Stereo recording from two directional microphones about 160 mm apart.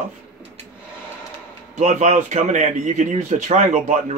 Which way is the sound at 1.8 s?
45° right (ahead or behind).